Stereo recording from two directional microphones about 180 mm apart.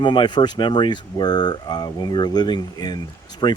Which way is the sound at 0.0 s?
25° left (ahead or behind).